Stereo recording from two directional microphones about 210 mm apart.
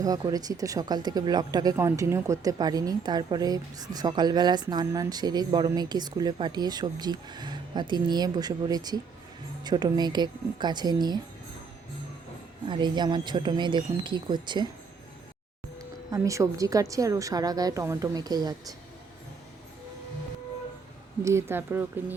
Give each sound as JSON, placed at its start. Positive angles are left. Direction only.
{"t": 0.0, "sound": "speech", "side_deg": -15}
{"t": 12.6, "sound": "speech", "side_deg": -20}
{"t": 16.1, "sound": "a woman's voice", "side_deg": -15}
{"t": 21.2, "sound": "a woman's voice", "side_deg": -10}